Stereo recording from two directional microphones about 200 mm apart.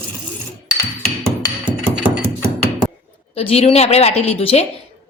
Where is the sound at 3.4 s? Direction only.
30° left (ahead or behind).